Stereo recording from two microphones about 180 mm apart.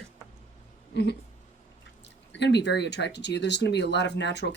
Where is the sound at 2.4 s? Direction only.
70° left (ahead or behind).